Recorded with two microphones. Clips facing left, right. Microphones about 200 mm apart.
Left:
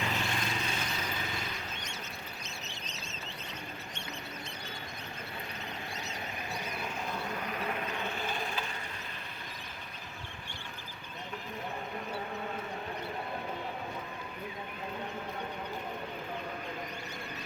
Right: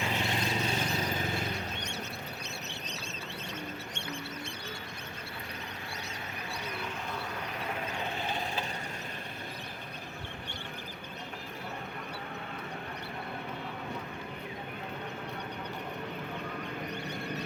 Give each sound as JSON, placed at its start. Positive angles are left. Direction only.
{"t": 0.0, "sound": "vehicle", "side_deg": -25}
{"t": 0.8, "sound": "vehicle", "side_deg": -40}